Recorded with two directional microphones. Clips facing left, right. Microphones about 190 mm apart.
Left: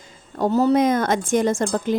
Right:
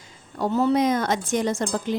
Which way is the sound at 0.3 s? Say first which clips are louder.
Left 3 dB; 40° left (ahead or behind).